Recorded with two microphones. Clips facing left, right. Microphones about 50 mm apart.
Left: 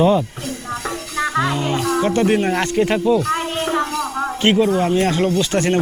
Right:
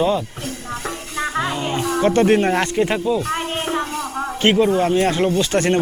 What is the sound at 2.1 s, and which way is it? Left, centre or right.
Speech, right.